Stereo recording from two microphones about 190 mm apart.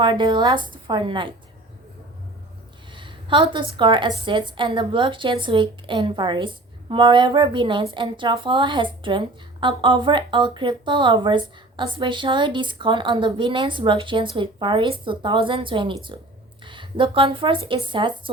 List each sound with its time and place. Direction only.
0.0 s a woman's voice: 25° right (ahead or behind)
2.9 s a woman's voice: 25° right (ahead or behind)